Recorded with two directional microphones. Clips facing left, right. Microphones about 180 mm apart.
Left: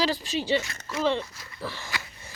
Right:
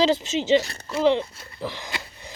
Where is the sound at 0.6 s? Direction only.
35° right (ahead or behind).